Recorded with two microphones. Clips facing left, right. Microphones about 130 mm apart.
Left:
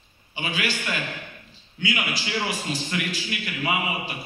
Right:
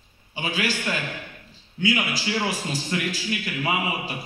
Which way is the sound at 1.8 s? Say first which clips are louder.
Right 4 dB; 40° right (ahead or behind).